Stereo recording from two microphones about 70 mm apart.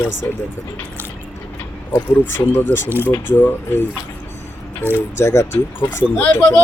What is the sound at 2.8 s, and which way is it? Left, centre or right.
Speech, right.